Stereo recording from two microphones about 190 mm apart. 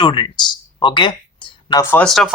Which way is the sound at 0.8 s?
25° left (ahead or behind).